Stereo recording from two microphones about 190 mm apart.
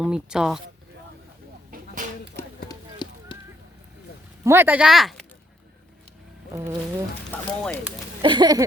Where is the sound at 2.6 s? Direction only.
20° left (ahead or behind).